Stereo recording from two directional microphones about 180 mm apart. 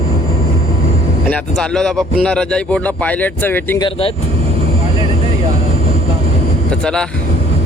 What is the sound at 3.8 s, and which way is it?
Speech, 25° left (ahead or behind).